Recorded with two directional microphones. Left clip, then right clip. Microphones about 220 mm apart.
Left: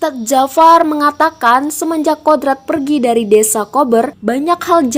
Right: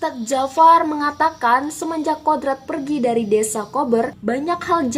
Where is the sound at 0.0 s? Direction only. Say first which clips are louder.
Left 8 dB; 40° left (ahead or behind).